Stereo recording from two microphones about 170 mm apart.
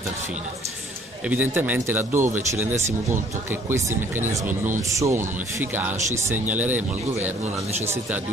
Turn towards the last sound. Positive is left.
turn(degrees=-10)  # may be behind; listen again after turning